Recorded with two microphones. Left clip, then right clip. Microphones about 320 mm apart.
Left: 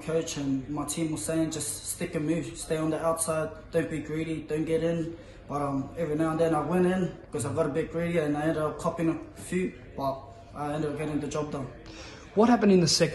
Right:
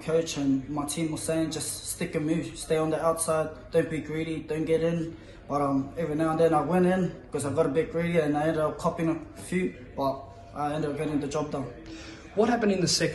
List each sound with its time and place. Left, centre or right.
0.0 s speech: centre
12.4 s a man's voice: centre